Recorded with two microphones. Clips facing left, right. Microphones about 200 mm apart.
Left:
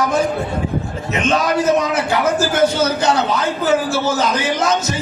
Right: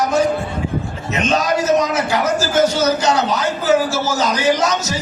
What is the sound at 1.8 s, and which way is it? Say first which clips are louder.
A man's voice: even; 55° left (ahead or behind).